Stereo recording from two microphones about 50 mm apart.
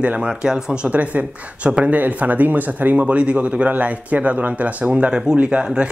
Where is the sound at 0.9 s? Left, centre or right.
Right.